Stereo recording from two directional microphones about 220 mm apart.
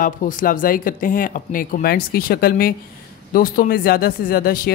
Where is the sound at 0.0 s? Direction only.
35° left (ahead or behind).